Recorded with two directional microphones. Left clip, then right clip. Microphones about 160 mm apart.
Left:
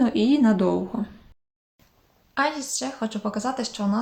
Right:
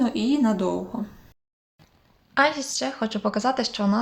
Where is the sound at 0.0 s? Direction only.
20° left (ahead or behind).